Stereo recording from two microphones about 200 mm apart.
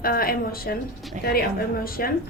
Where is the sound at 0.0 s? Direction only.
45° left (ahead or behind).